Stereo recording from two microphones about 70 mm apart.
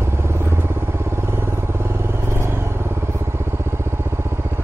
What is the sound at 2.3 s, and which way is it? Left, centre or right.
Vehicle, right.